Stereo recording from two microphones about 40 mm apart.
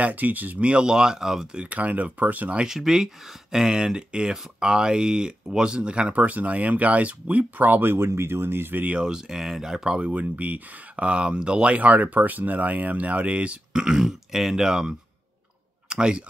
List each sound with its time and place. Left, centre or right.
0.0 s speech: right
0.7 s speech: centre
1.6 s speech: right
2.6 s speech: centre; by 6.1 s right
6.1 s speech: right
8.9 s speech: centre
9.9 s speech: right
11.1 s speech: right
11.8 s speech: right
13.7 s speech: centre